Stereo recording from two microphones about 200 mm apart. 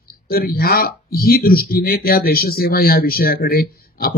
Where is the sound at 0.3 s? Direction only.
50° left (ahead or behind).